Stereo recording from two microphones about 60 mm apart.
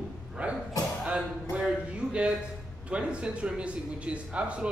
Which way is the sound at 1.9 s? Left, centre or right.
Centre.